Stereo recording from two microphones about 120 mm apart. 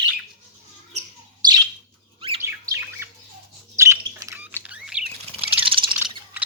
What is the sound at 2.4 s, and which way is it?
Bird, 20° right (ahead or behind).